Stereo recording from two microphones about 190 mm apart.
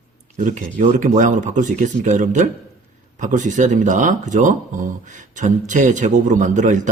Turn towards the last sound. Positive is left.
turn(degrees=-40)  # may be behind; listen again after turning